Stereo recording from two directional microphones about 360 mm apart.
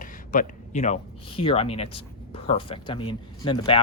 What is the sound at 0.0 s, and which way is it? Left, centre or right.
A man's voice, left.